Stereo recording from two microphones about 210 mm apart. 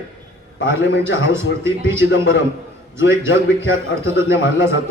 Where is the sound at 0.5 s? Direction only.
60° left (ahead or behind).